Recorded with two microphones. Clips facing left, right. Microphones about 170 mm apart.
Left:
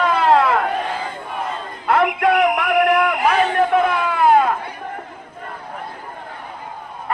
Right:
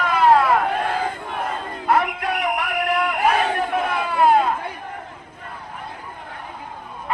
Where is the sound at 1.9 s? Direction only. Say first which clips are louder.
Left 5 dB; 55° left (ahead or behind).